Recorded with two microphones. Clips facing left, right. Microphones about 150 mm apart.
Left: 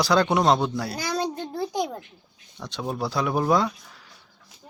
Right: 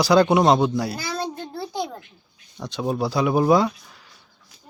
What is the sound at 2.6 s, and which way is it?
Speech, 5° right (ahead or behind).